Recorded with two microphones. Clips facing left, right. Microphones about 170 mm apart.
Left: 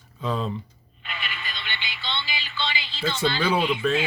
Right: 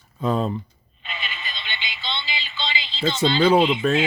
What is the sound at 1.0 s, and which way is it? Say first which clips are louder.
Music: right 1 dB; 20° right (ahead or behind).